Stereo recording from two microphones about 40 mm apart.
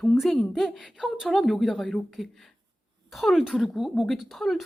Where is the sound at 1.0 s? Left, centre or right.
Centre.